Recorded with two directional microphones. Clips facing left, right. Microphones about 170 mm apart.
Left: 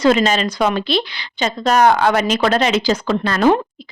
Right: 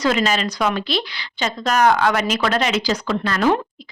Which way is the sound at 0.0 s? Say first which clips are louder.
Left 5 dB; 25° left (ahead or behind).